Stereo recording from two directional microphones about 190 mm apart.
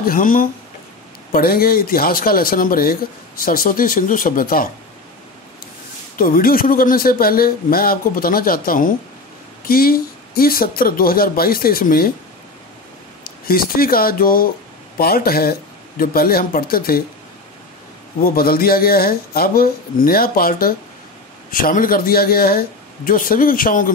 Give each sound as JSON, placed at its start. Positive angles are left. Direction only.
{"t": 0.0, "sound": "a man's voice", "side_deg": 45}
{"t": 6.1, "sound": "a man's voice", "side_deg": 50}
{"t": 13.2, "sound": "a man's voice", "side_deg": 50}
{"t": 18.2, "sound": "a man's voice", "side_deg": 50}